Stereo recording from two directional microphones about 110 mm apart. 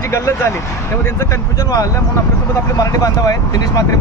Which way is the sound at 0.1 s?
25° left (ahead or behind).